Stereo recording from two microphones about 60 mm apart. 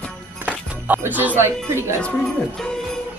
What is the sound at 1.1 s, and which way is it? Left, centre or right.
Speech, right.